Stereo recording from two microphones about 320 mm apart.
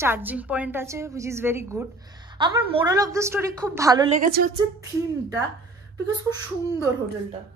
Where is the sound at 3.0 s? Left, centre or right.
Centre.